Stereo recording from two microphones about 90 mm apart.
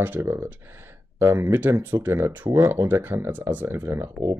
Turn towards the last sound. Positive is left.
turn(degrees=-25)  # may be behind; listen again after turning